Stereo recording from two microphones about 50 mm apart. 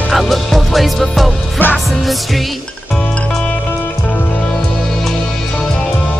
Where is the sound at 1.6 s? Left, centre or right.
Left.